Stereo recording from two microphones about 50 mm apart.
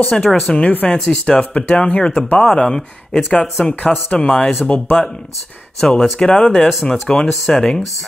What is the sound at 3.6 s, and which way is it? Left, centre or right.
Speech, left.